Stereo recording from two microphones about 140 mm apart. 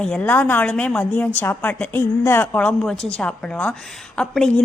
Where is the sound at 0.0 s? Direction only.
10° left (ahead or behind).